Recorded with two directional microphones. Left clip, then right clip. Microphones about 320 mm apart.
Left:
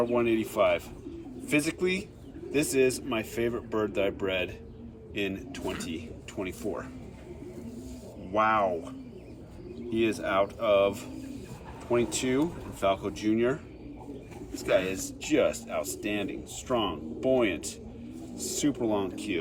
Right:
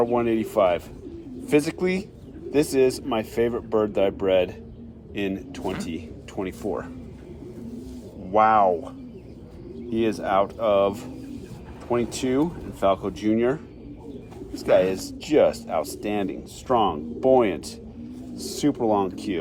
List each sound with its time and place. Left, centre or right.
0.0 s speech: centre
8.3 s speech: centre
9.9 s speech: centre
12.1 s speech: centre
14.7 s speech: centre